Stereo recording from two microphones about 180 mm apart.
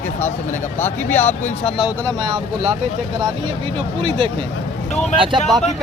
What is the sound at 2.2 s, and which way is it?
Speech, 25° right (ahead or behind).